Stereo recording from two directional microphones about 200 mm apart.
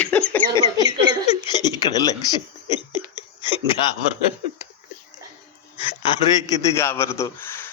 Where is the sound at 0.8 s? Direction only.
25° left (ahead or behind).